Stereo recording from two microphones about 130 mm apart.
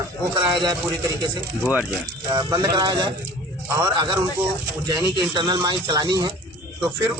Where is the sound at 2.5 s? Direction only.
35° right (ahead or behind).